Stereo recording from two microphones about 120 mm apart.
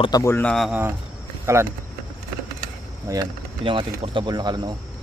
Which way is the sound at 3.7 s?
45° right (ahead or behind).